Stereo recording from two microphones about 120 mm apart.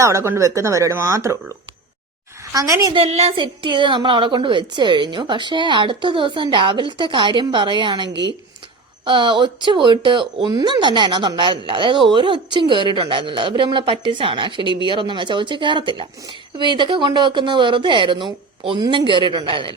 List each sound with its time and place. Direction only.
0.0 s speech: 25° right (ahead or behind)
2.9 s a woman's voice: 55° right (ahead or behind)
3.3 s a woman's voice: 45° right (ahead or behind)